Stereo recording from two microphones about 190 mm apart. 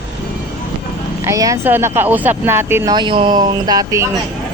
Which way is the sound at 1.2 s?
15° right (ahead or behind).